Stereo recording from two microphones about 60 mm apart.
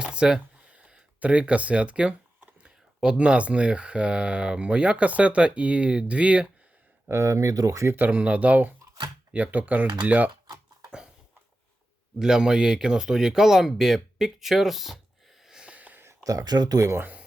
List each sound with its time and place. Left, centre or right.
0.0 s speech: centre
7.1 s speech: right
7.9 s speech: right
12.2 s speech: centre
15.4 s a sound: centre
15.7 s a sound: right
16.2 s speech: right
17.0 s speech: right